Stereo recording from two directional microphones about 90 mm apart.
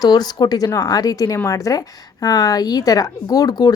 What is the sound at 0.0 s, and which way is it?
Speech, 50° left (ahead or behind).